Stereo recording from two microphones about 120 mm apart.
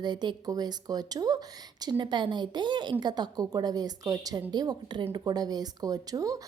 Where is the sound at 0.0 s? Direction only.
40° right (ahead or behind).